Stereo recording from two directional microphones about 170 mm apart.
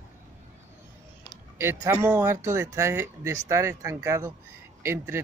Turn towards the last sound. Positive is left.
turn(degrees=-15)  # may be behind; listen again after turning